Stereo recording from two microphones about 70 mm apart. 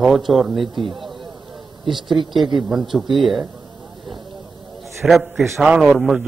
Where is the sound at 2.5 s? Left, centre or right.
Centre.